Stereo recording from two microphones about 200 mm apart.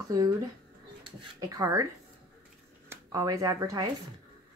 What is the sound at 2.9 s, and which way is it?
Speech, 15° right (ahead or behind).